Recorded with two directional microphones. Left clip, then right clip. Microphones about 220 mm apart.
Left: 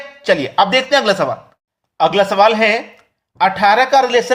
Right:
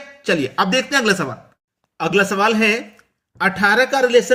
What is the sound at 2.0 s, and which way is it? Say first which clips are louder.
Speech: left 5 dB; 10° right (ahead or behind).